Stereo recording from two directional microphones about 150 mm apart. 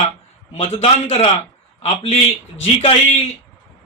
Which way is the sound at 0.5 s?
45° left (ahead or behind).